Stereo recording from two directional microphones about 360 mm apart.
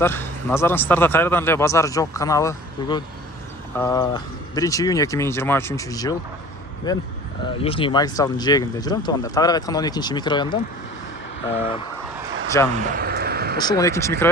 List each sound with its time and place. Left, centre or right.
0.0 s speech: centre
12.7 s a sound: right
13.6 s speech: centre